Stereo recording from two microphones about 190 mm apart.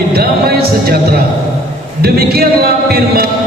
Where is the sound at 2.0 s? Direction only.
55° right (ahead or behind).